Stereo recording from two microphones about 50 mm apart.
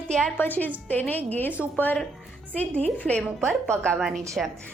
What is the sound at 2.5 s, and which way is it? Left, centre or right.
A woman's voice, left.